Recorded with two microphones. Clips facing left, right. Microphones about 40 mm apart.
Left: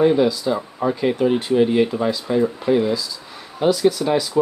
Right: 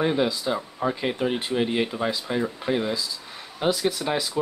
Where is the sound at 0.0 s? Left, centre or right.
Centre.